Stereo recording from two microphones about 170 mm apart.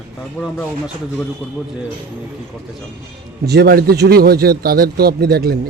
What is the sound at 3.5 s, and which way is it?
A man's voice, 70° right (ahead or behind).